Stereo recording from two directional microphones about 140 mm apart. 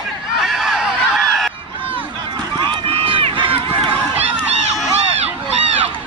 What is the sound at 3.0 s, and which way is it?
Crowd, 40° right (ahead or behind).